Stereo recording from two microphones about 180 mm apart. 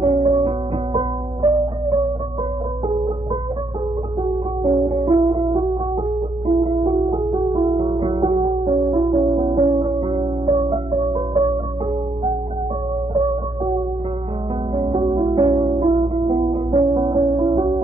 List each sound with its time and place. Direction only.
0.0 s music: 30° right (ahead or behind)
4.2 s music: 30° right (ahead or behind)
14.8 s music: 30° right (ahead or behind)